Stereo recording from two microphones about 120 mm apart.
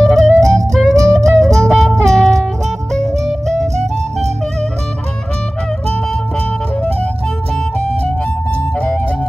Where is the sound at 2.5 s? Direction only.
75° right (ahead or behind).